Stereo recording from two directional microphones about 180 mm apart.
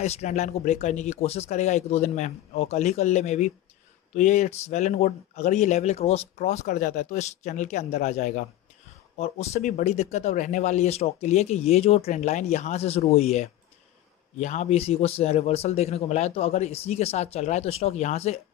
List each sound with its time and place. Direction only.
0.0 s speech: 40° left (ahead or behind)